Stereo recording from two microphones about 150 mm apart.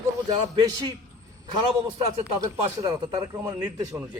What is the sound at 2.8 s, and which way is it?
Speech, 25° right (ahead or behind).